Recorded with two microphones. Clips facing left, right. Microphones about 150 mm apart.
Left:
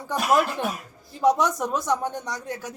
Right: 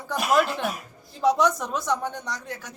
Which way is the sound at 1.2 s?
15° left (ahead or behind).